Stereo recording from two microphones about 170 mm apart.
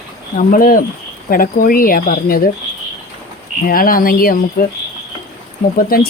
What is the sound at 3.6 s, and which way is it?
Speech, 55° left (ahead or behind).